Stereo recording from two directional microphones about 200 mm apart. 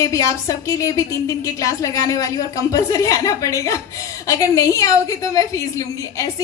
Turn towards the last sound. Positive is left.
turn(degrees=15)  # may be behind; listen again after turning